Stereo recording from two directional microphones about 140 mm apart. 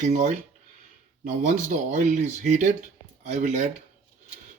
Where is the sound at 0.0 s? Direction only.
60° right (ahead or behind).